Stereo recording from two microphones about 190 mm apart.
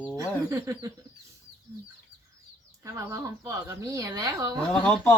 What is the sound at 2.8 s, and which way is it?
Speech, 15° right (ahead or behind).